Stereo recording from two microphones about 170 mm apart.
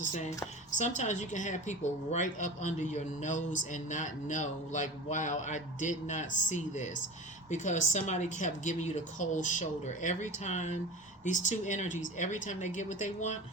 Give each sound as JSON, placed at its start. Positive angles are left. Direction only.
{"t": 0.0, "sound": "a woman's voice", "side_deg": 45}